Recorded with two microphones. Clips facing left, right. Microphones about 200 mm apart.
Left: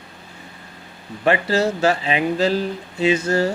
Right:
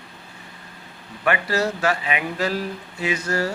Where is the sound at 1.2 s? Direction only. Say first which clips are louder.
Left 4 dB; 25° left (ahead or behind).